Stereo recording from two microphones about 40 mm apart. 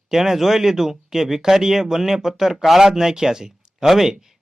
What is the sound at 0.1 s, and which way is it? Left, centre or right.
Speech, centre.